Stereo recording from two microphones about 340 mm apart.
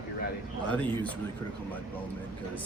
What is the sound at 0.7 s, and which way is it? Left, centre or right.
Speech, centre.